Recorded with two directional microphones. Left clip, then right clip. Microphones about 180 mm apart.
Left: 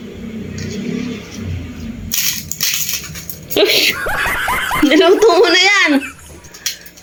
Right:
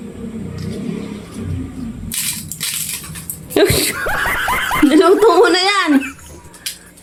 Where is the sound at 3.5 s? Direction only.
25° right (ahead or behind).